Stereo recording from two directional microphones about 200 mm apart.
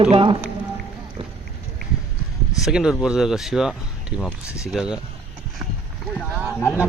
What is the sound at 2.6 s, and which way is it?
Speech, centre (ahead or behind).